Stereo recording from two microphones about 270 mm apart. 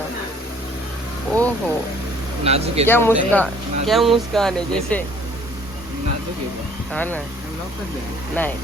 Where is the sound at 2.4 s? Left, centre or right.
Right.